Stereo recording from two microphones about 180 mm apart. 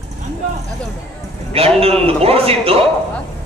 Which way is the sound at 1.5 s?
35° right (ahead or behind).